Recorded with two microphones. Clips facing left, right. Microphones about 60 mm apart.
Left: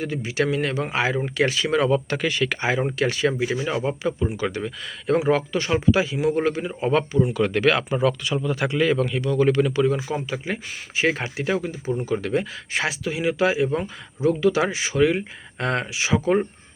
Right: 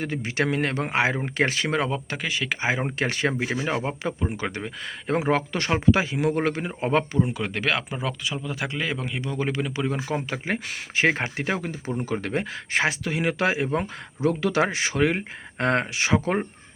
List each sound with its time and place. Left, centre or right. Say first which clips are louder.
0.0 s speech: left 2 dB; right
1.9 s speech: left 6 dB; centre
2.6 s speech: left 2 dB; right
3.1 s speech: left 3 dB; right
5.2 s speech: left 2 dB; right
7.3 s speech: left 6 dB; centre
9.0 s speech: left 7 dB; right
9.5 s speech: left 8 dB; centre
9.9 s speech: left 2 dB; right